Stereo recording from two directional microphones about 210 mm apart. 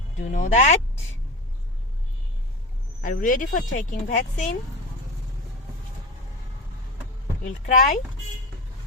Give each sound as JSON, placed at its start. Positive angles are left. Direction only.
{"t": 0.2, "sound": "speech", "side_deg": 35}
{"t": 3.0, "sound": "speech", "side_deg": 40}
{"t": 7.4, "sound": "speech", "side_deg": 40}